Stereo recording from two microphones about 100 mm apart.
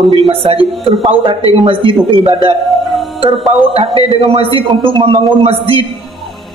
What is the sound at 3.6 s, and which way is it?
Speech, 75° right (ahead or behind).